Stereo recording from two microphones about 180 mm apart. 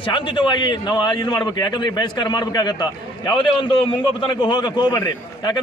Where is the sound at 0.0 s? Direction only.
25° left (ahead or behind).